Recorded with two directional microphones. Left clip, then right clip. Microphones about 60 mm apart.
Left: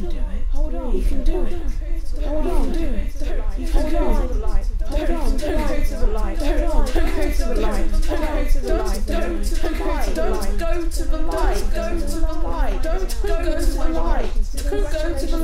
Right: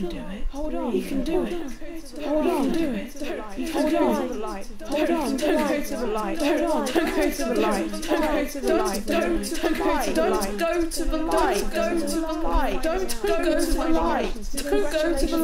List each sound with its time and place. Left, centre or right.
0.7 s a woman's voice: right